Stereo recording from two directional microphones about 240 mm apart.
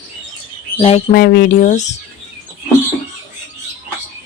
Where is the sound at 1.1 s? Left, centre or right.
Left.